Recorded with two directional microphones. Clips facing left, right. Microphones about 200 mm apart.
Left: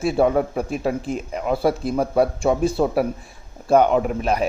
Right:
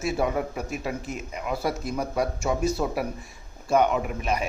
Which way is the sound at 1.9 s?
60° left (ahead or behind).